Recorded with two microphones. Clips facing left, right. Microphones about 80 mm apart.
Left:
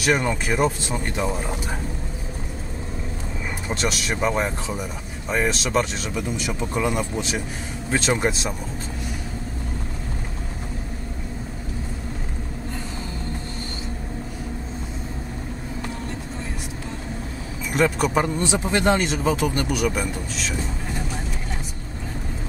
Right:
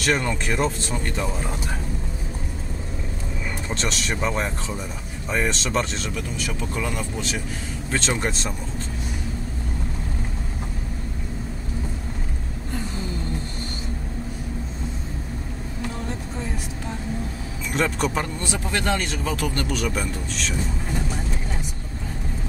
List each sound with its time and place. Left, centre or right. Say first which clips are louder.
0.0 s speech: left 2 dB; centre
3.6 s speech: left 3 dB; centre
17.7 s speech: left 3 dB; centre
18.2 s speech: left 5 dB; centre